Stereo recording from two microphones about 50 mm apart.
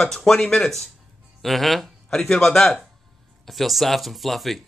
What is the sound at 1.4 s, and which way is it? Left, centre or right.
Speech, centre.